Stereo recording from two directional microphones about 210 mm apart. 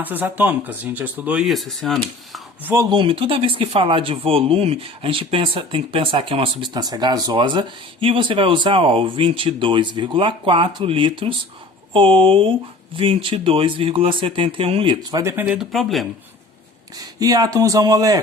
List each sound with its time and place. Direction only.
0.0 s speech: 10° right (ahead or behind)
2.7 s speech: 25° right (ahead or behind); by 16.0 s centre (ahead or behind)
17.0 s speech: 15° right (ahead or behind)